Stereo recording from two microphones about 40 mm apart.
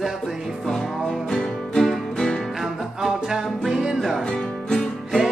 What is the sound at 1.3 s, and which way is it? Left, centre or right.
Music, centre.